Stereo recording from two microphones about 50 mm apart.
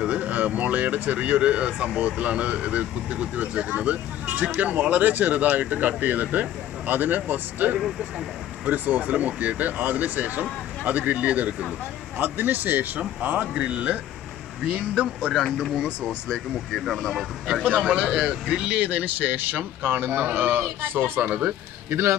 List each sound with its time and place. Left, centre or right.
0.0 s speech: right
13.6 s speech: right
15.3 s speech: centre
18.1 s speech: centre
20.8 s speech: right